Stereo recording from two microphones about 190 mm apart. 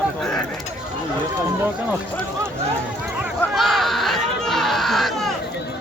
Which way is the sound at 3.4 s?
Centre (ahead or behind).